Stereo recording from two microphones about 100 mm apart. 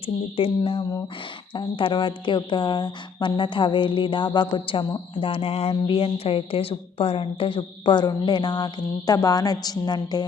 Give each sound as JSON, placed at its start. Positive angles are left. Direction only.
{"t": 0.0, "sound": "a woman's voice", "side_deg": 65}